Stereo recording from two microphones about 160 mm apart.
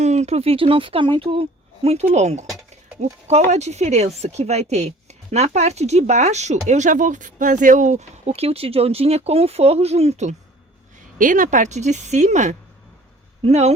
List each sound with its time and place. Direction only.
0.0 s a woman's voice: 45° right (ahead or behind)
11.2 s a woman's voice: 55° right (ahead or behind)